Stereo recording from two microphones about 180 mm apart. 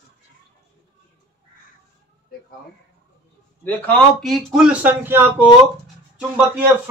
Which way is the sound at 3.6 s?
10° left (ahead or behind).